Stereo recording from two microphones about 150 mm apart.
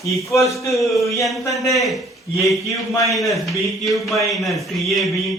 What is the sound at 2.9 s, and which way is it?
Speech, 20° left (ahead or behind).